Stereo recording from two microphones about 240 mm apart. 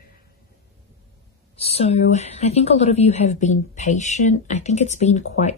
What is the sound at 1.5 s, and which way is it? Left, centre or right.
A woman's voice, left.